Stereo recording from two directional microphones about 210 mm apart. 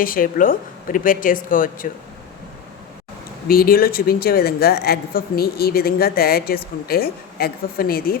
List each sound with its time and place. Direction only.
0.0 s a woman's voice: 40° left (ahead or behind)
3.5 s a woman's voice: 45° left (ahead or behind)